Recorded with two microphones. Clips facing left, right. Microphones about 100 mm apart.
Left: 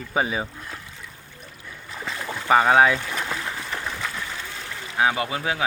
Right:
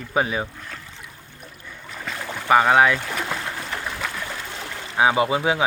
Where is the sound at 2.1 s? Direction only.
Centre (ahead or behind).